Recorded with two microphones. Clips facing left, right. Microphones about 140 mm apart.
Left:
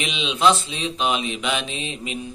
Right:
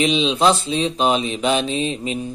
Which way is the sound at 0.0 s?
35° right (ahead or behind).